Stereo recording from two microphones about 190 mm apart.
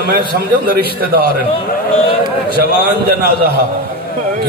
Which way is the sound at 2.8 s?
55° right (ahead or behind).